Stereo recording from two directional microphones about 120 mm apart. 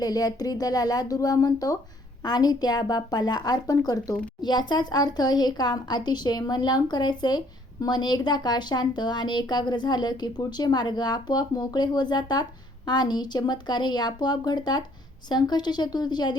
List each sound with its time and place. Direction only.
0.0 s speech: 30° left (ahead or behind)